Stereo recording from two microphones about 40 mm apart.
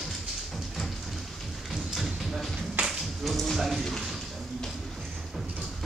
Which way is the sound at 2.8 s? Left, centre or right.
Right.